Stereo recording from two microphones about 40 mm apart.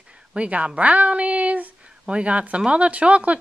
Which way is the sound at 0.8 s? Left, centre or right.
Right.